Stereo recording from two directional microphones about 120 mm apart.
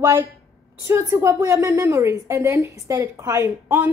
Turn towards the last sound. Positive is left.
turn(degrees=-15)  # may be behind; listen again after turning